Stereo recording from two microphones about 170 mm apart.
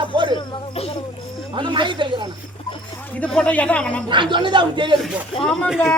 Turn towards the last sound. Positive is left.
turn(degrees=5)  # may be behind; listen again after turning